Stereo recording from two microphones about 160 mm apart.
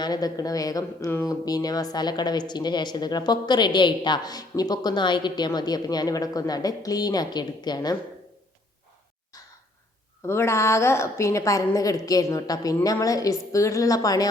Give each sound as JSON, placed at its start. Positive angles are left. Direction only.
{"t": 0.0, "sound": "speech", "side_deg": 25}
{"t": 10.2, "sound": "speech", "side_deg": 15}